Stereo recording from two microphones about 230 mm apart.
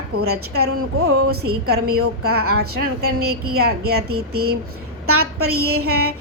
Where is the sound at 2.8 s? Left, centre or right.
Right.